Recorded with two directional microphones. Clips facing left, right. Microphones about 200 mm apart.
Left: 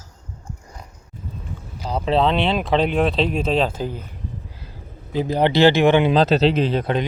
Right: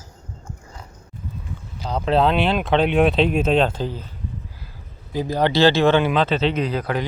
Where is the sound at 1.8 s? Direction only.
5° left (ahead or behind).